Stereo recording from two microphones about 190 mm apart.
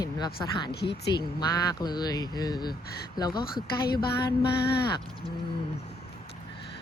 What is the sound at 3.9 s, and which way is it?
Music, 55° left (ahead or behind).